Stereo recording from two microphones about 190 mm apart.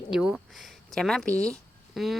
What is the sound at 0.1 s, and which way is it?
A woman's voice, 5° right (ahead or behind).